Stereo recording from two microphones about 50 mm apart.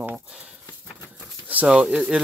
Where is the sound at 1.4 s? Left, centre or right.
Right.